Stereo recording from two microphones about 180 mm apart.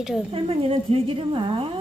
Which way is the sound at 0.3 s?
30° right (ahead or behind).